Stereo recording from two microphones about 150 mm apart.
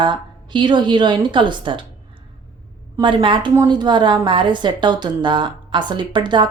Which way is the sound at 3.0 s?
35° right (ahead or behind).